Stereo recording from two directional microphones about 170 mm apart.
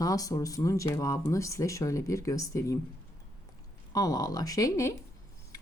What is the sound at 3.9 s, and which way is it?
A woman's voice, 20° left (ahead or behind).